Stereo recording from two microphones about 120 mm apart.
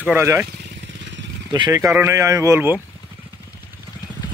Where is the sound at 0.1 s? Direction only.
20° right (ahead or behind).